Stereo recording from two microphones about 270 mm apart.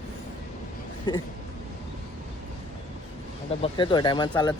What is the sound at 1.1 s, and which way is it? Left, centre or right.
Speech, centre.